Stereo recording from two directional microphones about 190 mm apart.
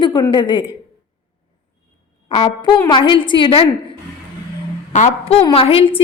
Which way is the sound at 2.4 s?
25° left (ahead or behind).